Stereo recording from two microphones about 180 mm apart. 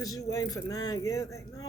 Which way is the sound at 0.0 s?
20° left (ahead or behind).